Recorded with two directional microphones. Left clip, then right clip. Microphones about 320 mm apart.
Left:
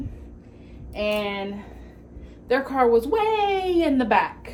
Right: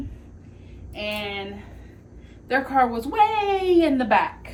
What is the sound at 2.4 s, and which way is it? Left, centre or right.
Speech, centre.